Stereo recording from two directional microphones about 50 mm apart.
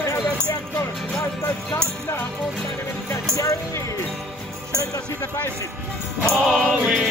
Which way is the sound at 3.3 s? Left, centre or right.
Left.